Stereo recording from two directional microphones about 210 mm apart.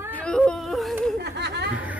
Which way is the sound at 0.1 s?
5° left (ahead or behind).